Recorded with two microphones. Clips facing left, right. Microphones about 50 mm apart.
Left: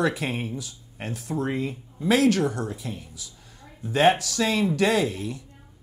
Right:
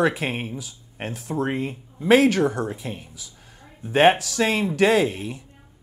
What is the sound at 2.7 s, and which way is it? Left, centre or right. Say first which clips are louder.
Speech: right 2 dB; right.